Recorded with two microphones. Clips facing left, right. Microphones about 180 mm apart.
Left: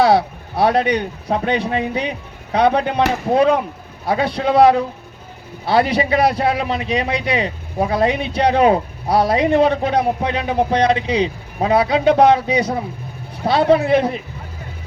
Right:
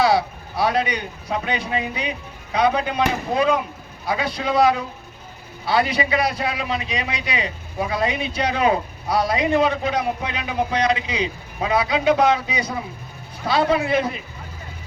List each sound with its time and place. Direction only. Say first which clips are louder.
0.0 s a man's voice: left 4 dB; 60° left (ahead or behind)